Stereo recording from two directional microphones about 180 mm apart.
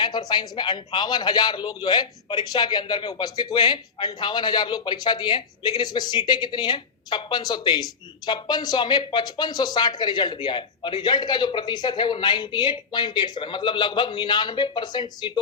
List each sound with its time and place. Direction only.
0.0 s a man's voice: 25° left (ahead or behind)